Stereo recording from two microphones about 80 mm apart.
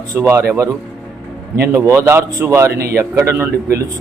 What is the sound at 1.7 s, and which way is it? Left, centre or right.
Speech, right.